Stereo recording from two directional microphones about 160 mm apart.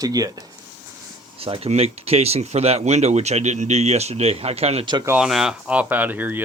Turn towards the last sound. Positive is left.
turn(degrees=-10)  # may be behind; listen again after turning